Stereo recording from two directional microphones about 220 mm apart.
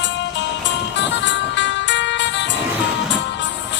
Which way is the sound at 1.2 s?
55° left (ahead or behind).